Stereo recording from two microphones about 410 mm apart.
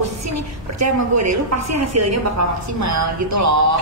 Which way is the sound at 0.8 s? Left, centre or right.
Right.